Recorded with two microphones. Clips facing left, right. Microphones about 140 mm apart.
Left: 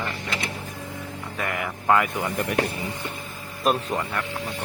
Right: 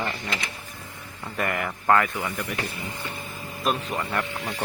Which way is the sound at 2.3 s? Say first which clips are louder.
Left 7 dB; 60° left (ahead or behind).